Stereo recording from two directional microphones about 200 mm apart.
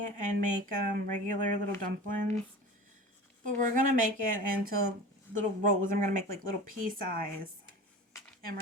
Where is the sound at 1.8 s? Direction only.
40° right (ahead or behind).